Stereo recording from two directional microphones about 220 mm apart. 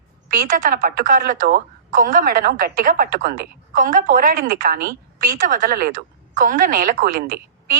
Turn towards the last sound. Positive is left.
turn(degrees=-40)  # may be behind; listen again after turning